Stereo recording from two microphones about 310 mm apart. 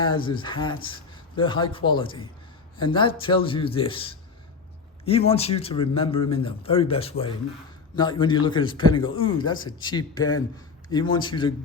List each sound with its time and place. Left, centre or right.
0.0 s a man's voice: centre